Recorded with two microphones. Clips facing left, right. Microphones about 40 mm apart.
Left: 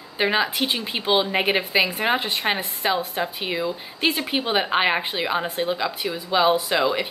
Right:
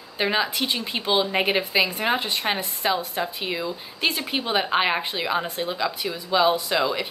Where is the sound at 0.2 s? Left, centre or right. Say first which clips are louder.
Left 2 dB; centre.